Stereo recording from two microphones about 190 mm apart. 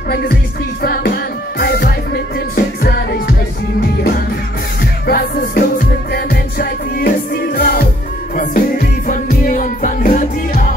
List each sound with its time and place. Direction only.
0.8 s music: 55° left (ahead or behind)
5.0 s music: 55° left (ahead or behind)